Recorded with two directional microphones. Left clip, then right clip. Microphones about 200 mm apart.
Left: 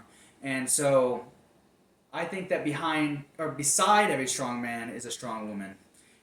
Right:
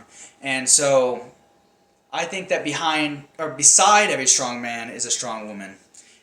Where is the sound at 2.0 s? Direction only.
20° left (ahead or behind).